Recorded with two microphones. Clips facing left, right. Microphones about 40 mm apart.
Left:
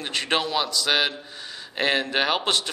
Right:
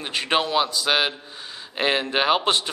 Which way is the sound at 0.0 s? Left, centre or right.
Right.